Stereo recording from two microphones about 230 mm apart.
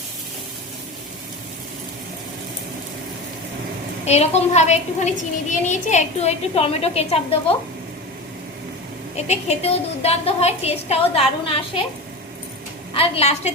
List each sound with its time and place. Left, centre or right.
4.0 s a woman's voice: left
9.1 s a woman's voice: left
12.9 s a woman's voice: left